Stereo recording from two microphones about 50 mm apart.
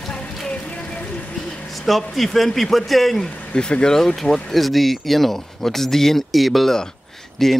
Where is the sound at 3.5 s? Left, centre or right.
Centre.